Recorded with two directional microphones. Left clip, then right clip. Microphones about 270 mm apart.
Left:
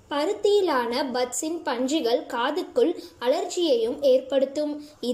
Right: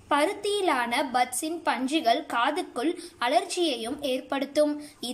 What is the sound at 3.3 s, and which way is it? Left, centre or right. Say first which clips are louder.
Speech: left 4 dB; right.